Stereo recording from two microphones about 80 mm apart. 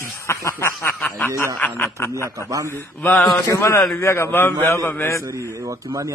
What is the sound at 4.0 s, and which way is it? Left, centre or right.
A man's voice, left.